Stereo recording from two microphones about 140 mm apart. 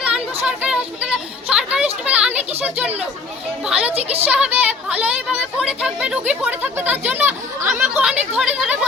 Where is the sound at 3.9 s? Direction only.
45° right (ahead or behind).